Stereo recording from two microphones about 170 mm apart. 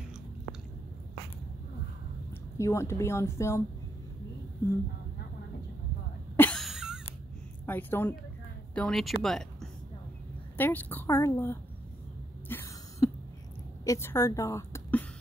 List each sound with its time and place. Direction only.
2.5 s speech: 15° left (ahead or behind)
6.3 s cough: 10° left (ahead or behind)
6.6 s cough: 5° right (ahead or behind)
7.6 s speech: 10° left (ahead or behind)
12.4 s a sound: 10° left (ahead or behind)
13.8 s a woman's voice: 15° left (ahead or behind)